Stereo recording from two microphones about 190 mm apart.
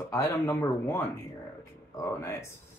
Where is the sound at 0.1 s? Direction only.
15° left (ahead or behind).